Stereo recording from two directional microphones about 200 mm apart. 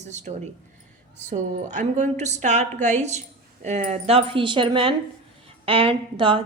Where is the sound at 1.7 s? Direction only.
35° right (ahead or behind).